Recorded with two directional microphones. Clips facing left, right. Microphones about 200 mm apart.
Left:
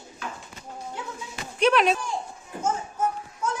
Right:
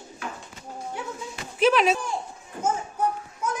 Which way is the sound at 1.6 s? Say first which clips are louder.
Right 1 dB; centre (ahead or behind).